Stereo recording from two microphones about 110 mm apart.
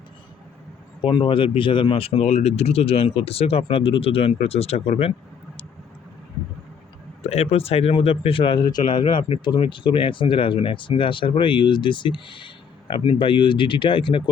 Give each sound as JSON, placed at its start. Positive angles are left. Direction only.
{"t": 1.0, "sound": "speech", "side_deg": 50}
{"t": 7.2, "sound": "speech", "side_deg": 70}